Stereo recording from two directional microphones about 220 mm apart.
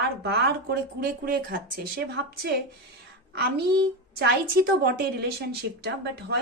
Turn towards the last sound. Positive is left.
turn(degrees=-45)  # may be behind; listen again after turning